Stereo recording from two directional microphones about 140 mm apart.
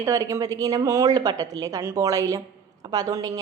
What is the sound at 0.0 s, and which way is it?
Speech, 20° right (ahead or behind).